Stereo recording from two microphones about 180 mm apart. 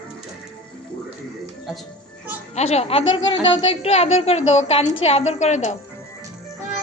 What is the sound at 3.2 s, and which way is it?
A woman's voice, 30° left (ahead or behind).